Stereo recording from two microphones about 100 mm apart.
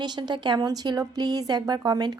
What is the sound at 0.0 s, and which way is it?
Speech, 45° right (ahead or behind).